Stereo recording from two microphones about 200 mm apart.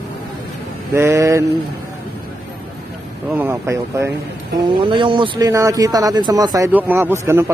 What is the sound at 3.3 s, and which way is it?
Speech, 10° right (ahead or behind).